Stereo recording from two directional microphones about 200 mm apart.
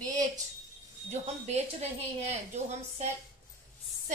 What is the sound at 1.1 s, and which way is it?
A woman's voice, 35° right (ahead or behind).